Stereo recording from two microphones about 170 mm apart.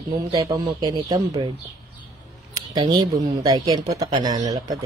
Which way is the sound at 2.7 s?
30° right (ahead or behind).